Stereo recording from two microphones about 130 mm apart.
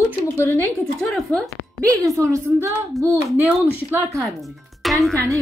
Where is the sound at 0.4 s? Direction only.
20° left (ahead or behind).